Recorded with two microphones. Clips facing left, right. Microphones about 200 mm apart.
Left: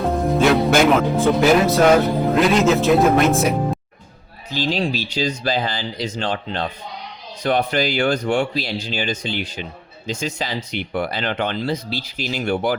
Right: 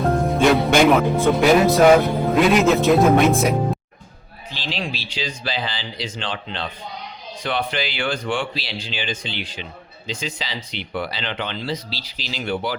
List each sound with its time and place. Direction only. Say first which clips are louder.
0.0 s speech: even; centre (ahead or behind)
4.5 s speech: left 8 dB; 45° left (ahead or behind)